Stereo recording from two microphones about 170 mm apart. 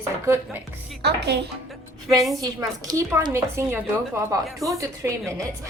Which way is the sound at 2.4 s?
20° right (ahead or behind).